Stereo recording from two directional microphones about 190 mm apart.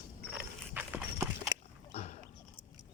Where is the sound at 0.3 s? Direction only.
5° right (ahead or behind).